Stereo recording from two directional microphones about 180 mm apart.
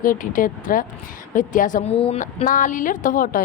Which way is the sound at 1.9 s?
30° left (ahead or behind).